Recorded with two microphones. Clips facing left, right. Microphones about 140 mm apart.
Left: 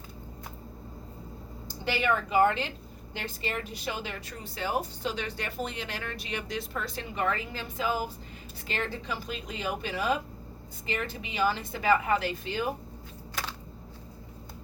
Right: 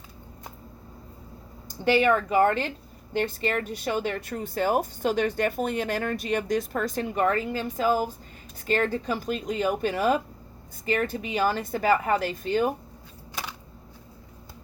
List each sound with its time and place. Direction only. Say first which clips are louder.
1.8 s speech: right 7 dB; 45° right (ahead or behind)